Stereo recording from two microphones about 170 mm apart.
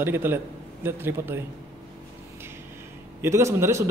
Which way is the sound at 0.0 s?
10° right (ahead or behind).